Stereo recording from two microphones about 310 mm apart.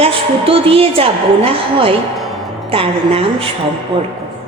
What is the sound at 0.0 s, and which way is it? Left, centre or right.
A woman's voice, centre.